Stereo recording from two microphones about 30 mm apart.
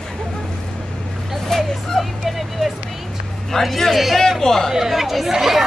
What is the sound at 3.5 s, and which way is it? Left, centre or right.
A man's voice, centre.